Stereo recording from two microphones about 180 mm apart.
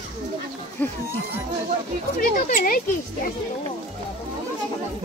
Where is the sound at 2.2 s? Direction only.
50° left (ahead or behind).